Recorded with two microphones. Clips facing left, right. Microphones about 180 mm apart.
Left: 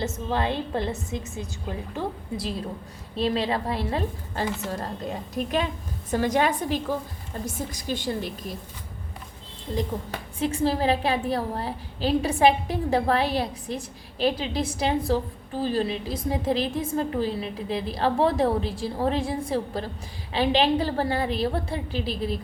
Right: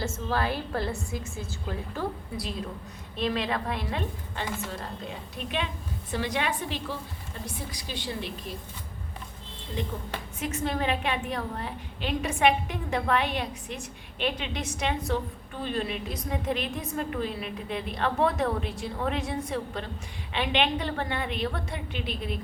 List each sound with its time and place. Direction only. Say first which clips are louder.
0.0 s a woman's voice: left 2 dB; 20° left (ahead or behind); by 8.5 s 45° left (ahead or behind)
10.4 s a woman's voice: left 6 dB; 30° left (ahead or behind)